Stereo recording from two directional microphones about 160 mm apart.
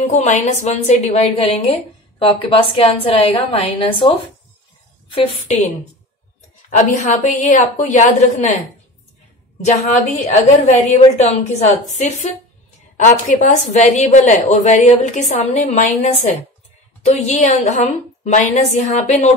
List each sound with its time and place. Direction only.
0.0 s a woman's voice: 45° left (ahead or behind)
5.5 s a woman's voice: 45° left (ahead or behind)
6.7 s a woman's voice: 45° left (ahead or behind)
9.7 s a woman's voice: 45° left (ahead or behind)
12.9 s a woman's voice: 50° left (ahead or behind)